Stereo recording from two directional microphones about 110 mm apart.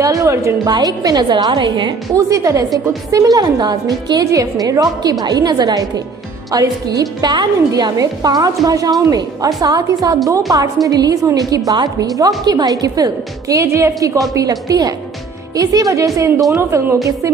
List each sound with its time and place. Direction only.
0.0 s a woman's voice: 30° right (ahead or behind); by 2.0 s 45° right (ahead or behind)
2.1 s a woman's voice: 30° right (ahead or behind)